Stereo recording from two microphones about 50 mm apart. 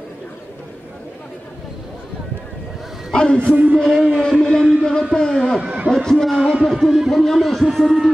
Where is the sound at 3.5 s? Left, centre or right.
Right.